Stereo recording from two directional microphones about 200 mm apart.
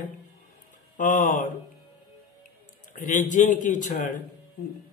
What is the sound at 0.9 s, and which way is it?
Speech, 40° left (ahead or behind).